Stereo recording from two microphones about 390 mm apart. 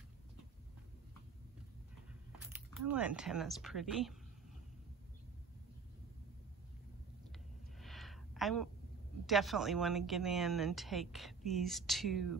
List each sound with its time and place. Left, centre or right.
2.4 s speech: centre
7.8 s a sound: centre
9.2 s a woman's voice: centre